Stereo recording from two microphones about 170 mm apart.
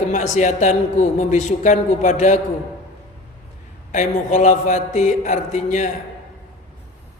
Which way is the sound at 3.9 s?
45° left (ahead or behind).